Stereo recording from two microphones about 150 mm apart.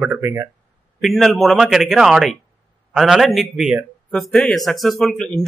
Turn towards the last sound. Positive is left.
turn(degrees=0)  # may be behind; listen again after turning